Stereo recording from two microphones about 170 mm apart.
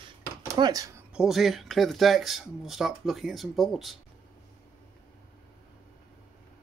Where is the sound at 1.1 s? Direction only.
Centre (ahead or behind).